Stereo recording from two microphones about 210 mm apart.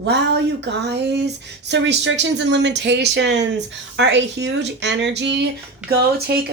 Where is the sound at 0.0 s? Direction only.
55° right (ahead or behind).